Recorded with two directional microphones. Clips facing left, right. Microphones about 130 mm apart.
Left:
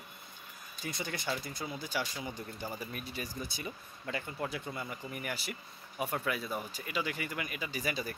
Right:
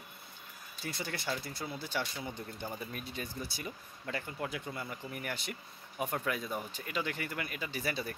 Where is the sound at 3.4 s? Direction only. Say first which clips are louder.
Left 1 dB; 20° left (ahead or behind).